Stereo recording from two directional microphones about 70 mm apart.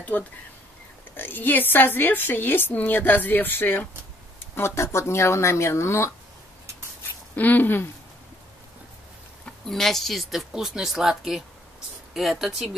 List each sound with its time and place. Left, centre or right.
0.1 s speech: left
7.0 s a sound: left
9.7 s speech: centre